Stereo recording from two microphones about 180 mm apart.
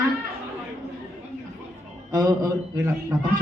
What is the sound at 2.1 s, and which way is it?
Speech, 20° right (ahead or behind).